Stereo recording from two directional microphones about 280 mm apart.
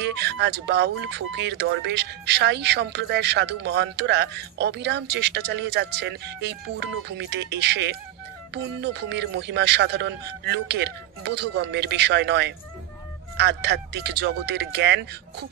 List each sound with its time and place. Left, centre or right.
0.0 s speech: right